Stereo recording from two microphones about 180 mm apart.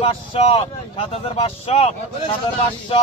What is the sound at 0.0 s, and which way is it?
Speech, 30° left (ahead or behind).